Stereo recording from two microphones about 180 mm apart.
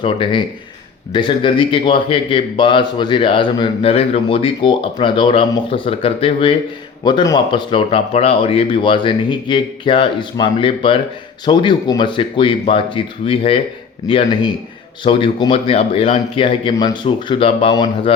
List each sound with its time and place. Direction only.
0.0 s a man's voice: 30° left (ahead or behind)